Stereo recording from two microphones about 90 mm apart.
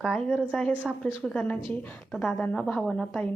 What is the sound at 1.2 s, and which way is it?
A woman's voice, 10° left (ahead or behind).